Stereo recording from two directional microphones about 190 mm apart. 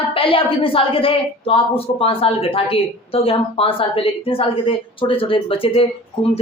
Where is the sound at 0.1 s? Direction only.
30° left (ahead or behind).